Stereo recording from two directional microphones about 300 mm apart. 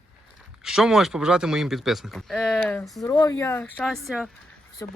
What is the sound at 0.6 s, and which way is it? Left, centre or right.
Speech, centre.